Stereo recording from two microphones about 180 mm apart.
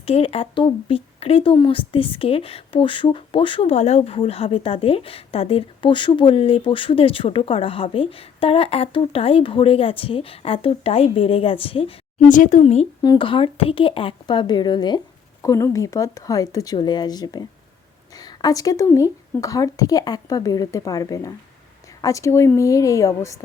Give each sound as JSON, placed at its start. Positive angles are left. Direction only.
{"t": 0.0, "sound": "speech", "side_deg": 35}
{"t": 12.3, "sound": "speech", "side_deg": 45}
{"t": 13.0, "sound": "a woman's voice", "side_deg": 25}